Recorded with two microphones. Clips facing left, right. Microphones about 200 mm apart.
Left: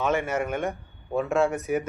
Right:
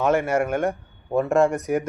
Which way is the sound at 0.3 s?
10° right (ahead or behind).